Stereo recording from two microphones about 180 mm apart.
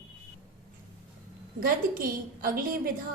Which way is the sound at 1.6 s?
50° right (ahead or behind).